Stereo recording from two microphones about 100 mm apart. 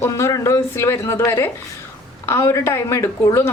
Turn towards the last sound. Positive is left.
turn(degrees=25)  # may be behind; listen again after turning